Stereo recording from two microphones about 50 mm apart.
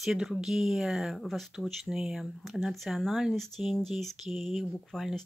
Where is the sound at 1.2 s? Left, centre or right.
Centre.